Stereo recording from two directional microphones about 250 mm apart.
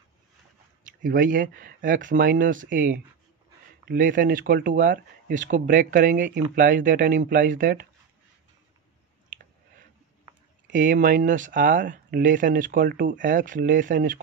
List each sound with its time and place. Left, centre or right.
0.8 s speech: right
10.7 s speech: right